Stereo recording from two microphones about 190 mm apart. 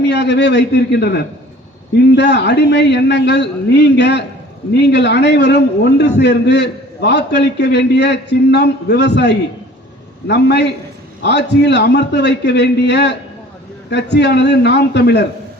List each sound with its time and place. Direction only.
0.1 s a man's voice: 65° left (ahead or behind)